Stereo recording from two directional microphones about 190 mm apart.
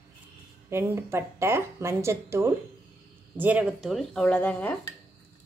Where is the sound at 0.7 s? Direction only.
15° right (ahead or behind); by 4.7 s 10° left (ahead or behind).